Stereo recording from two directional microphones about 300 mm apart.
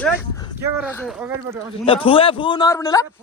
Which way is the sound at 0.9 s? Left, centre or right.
Centre.